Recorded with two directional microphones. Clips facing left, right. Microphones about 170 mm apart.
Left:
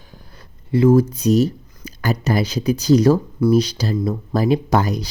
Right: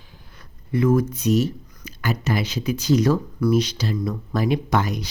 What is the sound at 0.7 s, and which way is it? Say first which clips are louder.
Speech: left 5 dB; 30° left (ahead or behind).